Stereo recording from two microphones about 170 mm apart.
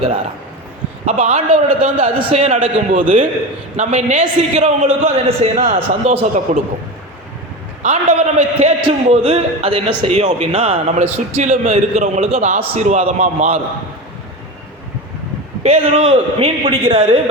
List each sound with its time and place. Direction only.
1.0 s a man's voice: 40° right (ahead or behind)
3.8 s a man's voice: 45° right (ahead or behind)
5.6 s a man's voice: 50° right (ahead or behind)
7.8 s a man's voice: 45° right (ahead or behind)
15.6 s a man's voice: 35° right (ahead or behind)